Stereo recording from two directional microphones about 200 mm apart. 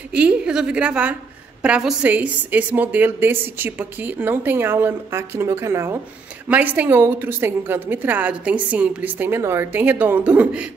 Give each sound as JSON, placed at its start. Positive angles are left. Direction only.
{"t": 0.1, "sound": "a woman's voice", "side_deg": -5}